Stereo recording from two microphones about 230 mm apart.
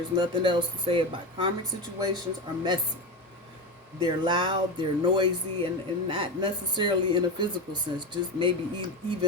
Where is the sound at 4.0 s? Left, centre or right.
Right.